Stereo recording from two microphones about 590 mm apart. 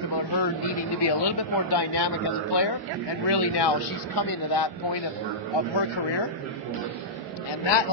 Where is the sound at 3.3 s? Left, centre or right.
Left.